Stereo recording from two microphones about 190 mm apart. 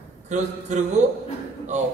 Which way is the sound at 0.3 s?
40° right (ahead or behind).